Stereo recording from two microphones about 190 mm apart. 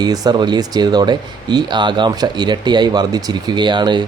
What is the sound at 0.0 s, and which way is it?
Speech, 20° right (ahead or behind).